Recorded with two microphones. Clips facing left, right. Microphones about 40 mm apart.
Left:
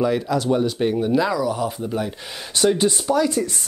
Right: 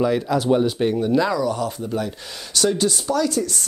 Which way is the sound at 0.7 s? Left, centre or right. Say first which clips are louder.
Even; centre.